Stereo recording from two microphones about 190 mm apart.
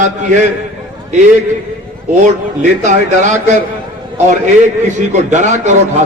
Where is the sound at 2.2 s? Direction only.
40° right (ahead or behind).